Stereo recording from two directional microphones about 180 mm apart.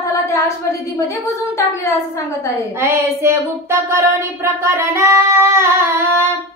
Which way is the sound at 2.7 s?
15° right (ahead or behind).